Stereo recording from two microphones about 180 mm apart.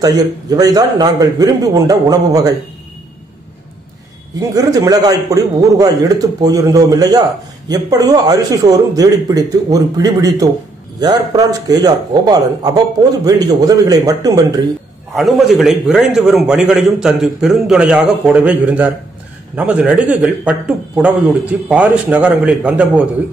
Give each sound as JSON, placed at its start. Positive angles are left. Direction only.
{"t": 0.0, "sound": "a man's voice", "side_deg": -20}
{"t": 4.4, "sound": "a man's voice", "side_deg": -20}
{"t": 11.0, "sound": "a man's voice", "side_deg": -20}
{"t": 15.1, "sound": "a man's voice", "side_deg": 0}